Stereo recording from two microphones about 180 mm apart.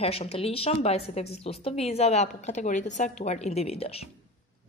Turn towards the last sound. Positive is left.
turn(degrees=35)  # may be behind; listen again after turning